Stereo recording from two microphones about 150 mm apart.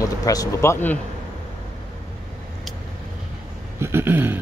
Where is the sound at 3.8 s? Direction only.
15° right (ahead or behind).